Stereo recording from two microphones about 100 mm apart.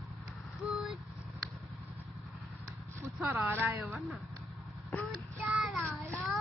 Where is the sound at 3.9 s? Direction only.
Centre (ahead or behind).